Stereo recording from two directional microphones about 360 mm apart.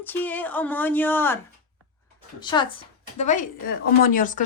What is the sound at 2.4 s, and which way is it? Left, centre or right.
Speech, centre.